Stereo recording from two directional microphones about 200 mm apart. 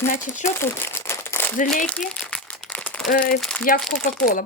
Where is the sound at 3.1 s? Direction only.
45° left (ahead or behind).